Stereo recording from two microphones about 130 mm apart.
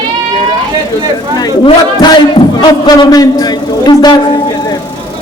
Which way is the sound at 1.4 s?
30° left (ahead or behind).